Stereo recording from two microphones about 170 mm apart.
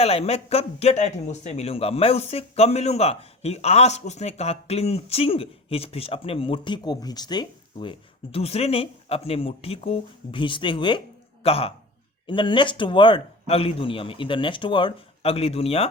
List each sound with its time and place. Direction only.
0.0 s speech: 35° left (ahead or behind)